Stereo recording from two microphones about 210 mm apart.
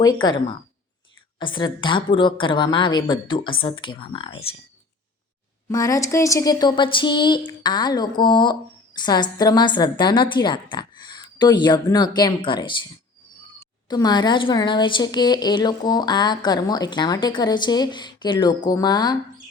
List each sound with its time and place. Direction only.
0.0 s speech: 20° left (ahead or behind)
5.6 s speech: 15° left (ahead or behind)
13.8 s speech: 20° left (ahead or behind)